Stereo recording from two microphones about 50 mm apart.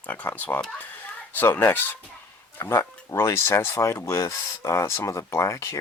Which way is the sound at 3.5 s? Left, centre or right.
Left.